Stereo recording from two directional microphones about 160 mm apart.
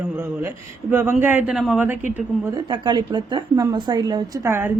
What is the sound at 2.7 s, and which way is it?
A woman's voice, 30° right (ahead or behind).